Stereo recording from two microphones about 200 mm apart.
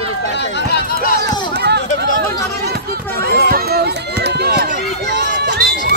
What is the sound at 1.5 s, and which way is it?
Run, 55° right (ahead or behind).